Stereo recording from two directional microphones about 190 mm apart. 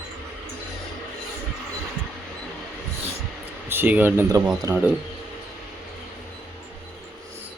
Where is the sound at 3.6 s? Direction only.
10° right (ahead or behind).